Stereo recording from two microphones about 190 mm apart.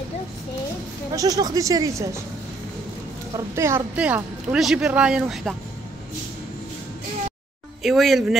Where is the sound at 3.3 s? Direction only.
15° right (ahead or behind).